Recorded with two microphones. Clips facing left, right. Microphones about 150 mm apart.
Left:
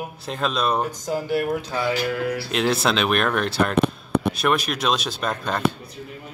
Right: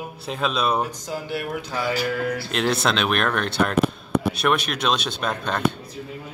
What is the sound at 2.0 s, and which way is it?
Speech, 5° left (ahead or behind).